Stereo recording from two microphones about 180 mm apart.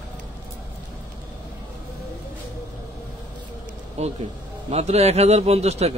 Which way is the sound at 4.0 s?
35° right (ahead or behind).